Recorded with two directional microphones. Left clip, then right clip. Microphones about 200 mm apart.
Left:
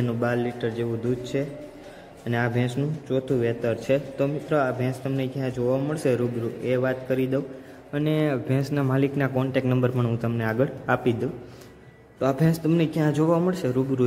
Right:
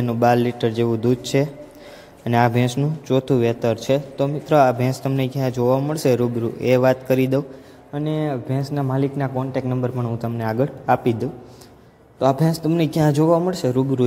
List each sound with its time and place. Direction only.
0.2 s a man's voice: 25° right (ahead or behind)
6.6 s a man's voice: 25° right (ahead or behind)
7.9 s speech: centre (ahead or behind)
9.7 s a man's voice: 10° left (ahead or behind)
10.1 s speech: centre (ahead or behind)
12.2 s speech: 10° right (ahead or behind)